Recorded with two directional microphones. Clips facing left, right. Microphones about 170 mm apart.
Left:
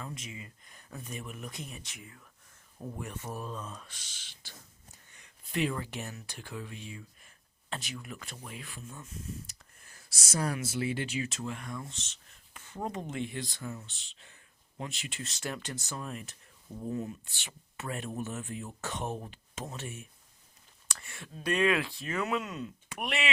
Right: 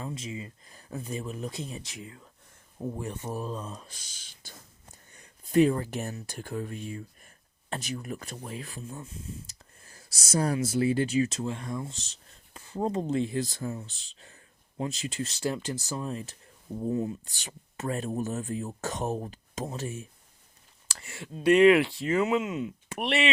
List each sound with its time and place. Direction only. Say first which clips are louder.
0.0 s speech: right 6 dB; 30° right (ahead or behind)
17.2 s speech: right 4 dB; 40° right (ahead or behind)